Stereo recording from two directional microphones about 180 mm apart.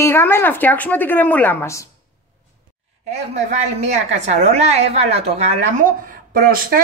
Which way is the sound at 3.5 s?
40° right (ahead or behind).